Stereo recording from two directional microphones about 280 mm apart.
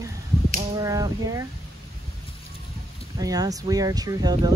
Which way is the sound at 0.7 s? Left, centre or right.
Centre.